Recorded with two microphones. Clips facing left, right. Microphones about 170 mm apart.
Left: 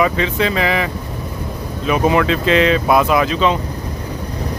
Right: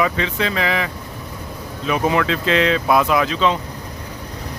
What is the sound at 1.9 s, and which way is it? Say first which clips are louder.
Speech: left 4 dB; 15° left (ahead or behind).